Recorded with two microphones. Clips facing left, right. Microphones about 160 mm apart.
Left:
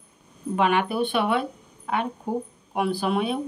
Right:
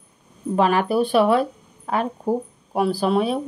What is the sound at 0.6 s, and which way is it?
A woman's voice, 35° right (ahead or behind).